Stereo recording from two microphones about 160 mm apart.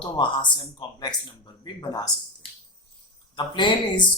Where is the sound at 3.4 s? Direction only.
30° left (ahead or behind).